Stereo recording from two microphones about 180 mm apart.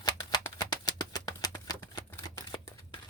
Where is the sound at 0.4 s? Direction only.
20° left (ahead or behind).